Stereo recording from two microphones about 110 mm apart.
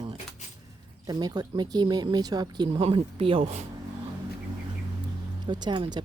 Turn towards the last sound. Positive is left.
turn(degrees=-40)  # may be behind; listen again after turning